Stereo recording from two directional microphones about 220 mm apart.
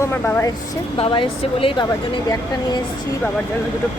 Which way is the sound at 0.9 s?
25° left (ahead or behind).